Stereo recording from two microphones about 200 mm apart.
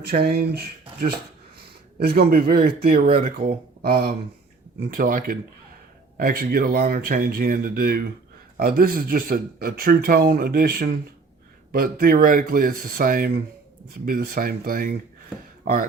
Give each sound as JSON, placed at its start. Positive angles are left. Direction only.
{"t": 0.0, "sound": "speech", "side_deg": -50}